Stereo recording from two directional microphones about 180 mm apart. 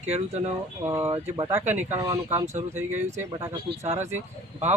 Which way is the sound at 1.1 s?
30° right (ahead or behind).